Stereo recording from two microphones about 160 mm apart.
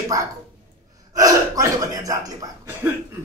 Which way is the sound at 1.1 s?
20° right (ahead or behind).